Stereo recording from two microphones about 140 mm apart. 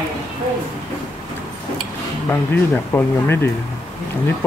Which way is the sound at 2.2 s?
15° left (ahead or behind).